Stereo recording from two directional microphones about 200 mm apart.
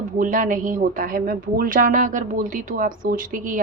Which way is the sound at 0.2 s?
40° right (ahead or behind).